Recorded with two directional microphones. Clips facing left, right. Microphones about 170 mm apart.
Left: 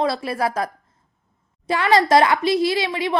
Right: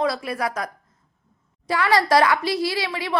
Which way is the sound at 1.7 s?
25° left (ahead or behind).